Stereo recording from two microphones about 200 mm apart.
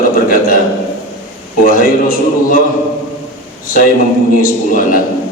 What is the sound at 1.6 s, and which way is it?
Speech, 45° left (ahead or behind).